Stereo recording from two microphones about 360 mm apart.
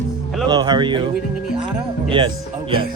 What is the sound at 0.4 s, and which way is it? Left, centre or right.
A man's voice, centre.